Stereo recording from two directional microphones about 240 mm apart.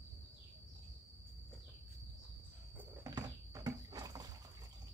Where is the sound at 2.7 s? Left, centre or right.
Centre.